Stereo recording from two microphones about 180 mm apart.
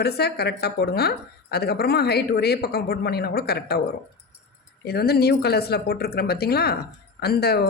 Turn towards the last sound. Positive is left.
turn(degrees=60)  # may be behind; listen again after turning